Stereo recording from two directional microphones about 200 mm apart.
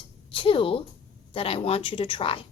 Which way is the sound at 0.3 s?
25° left (ahead or behind).